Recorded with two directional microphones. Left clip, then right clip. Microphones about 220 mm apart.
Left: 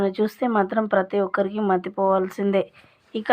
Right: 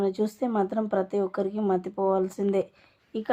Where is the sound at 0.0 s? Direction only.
20° left (ahead or behind).